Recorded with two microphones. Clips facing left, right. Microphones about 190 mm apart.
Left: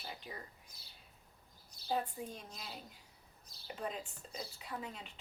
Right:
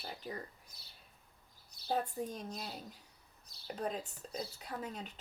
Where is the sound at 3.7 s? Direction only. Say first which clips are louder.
Right 3 dB; 40° right (ahead or behind).